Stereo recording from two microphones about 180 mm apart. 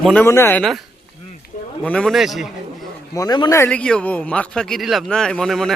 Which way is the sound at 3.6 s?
5° left (ahead or behind).